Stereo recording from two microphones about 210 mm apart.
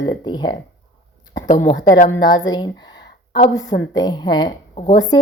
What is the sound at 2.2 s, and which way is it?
A woman's voice, 20° left (ahead or behind).